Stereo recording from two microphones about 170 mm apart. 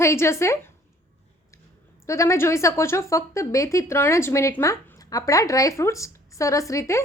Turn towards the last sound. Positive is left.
turn(degrees=20)  # may be behind; listen again after turning